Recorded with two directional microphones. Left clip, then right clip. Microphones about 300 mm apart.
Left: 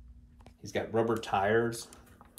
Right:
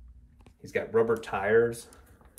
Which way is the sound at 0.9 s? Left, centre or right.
Centre.